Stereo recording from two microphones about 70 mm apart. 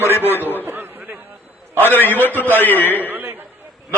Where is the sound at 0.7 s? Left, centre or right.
Right.